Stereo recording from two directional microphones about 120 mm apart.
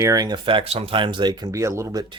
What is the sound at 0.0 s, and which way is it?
Speech, 30° right (ahead or behind).